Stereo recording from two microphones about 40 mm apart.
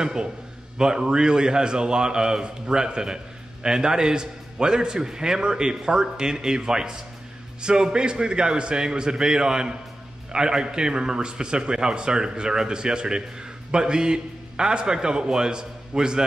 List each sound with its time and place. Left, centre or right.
0.0 s a man's voice: centre